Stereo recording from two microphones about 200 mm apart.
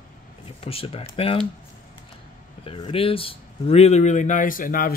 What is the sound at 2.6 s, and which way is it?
Speech, 30° left (ahead or behind).